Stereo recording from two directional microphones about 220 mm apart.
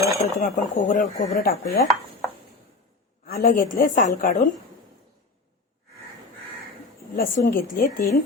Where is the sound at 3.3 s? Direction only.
40° left (ahead or behind).